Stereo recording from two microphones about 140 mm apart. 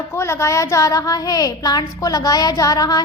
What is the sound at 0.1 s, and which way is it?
A woman's voice, 20° left (ahead or behind).